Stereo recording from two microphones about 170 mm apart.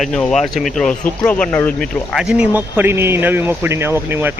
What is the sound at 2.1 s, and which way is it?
Speech, 5° right (ahead or behind).